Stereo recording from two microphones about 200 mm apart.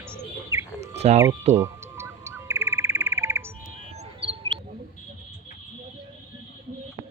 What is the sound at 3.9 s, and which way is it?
Chirp, 30° right (ahead or behind).